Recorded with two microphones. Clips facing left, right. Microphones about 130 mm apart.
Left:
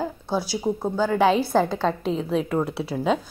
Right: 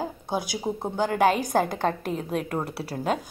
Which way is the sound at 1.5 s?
50° right (ahead or behind).